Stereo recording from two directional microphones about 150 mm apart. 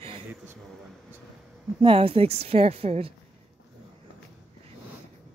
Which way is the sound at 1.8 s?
40° right (ahead or behind).